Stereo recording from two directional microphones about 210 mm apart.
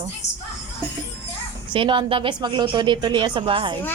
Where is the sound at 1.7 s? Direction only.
25° right (ahead or behind).